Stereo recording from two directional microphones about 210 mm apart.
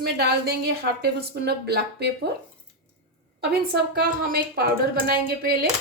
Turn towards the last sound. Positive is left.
turn(degrees=-45)  # may be behind; listen again after turning